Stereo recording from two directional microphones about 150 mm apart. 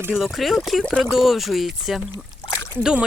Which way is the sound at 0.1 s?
Centre (ahead or behind).